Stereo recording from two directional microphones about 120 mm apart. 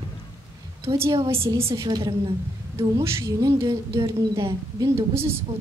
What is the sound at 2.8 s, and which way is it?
A woman's voice, 25° right (ahead or behind).